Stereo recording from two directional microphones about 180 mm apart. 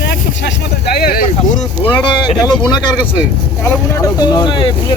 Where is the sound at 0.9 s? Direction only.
55° left (ahead or behind).